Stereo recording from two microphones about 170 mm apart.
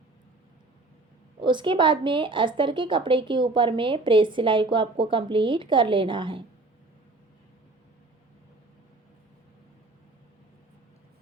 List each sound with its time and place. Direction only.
1.4 s a woman's voice: 30° right (ahead or behind)